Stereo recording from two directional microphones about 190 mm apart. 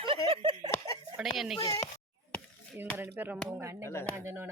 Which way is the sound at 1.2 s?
5° right (ahead or behind).